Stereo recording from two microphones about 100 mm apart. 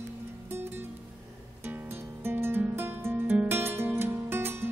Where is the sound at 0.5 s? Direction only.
25° right (ahead or behind).